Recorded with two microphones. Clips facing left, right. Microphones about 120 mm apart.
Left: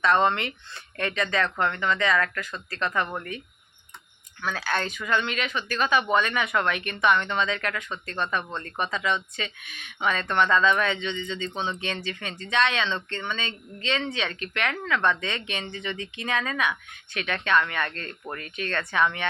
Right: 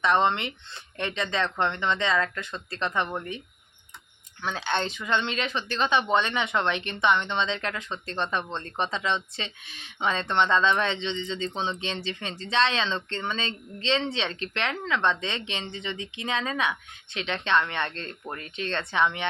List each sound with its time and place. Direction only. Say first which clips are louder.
0.0 s speech: left 1 dB; 20° right (ahead or behind)
4.4 s speech: even; 25° right (ahead or behind)